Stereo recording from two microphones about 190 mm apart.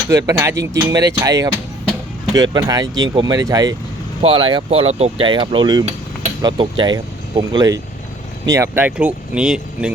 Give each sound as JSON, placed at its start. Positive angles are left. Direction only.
{"t": 0.1, "sound": "speech", "side_deg": -15}